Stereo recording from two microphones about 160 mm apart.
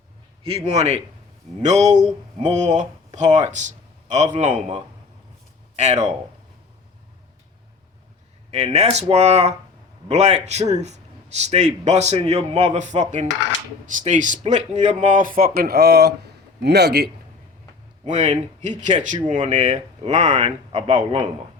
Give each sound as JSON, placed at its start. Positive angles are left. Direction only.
{"t": 0.4, "sound": "a man's voice", "side_deg": -40}
{"t": 5.7, "sound": "speech", "side_deg": -45}
{"t": 8.4, "sound": "a man's voice", "side_deg": -45}
{"t": 18.0, "sound": "a man's voice", "side_deg": -45}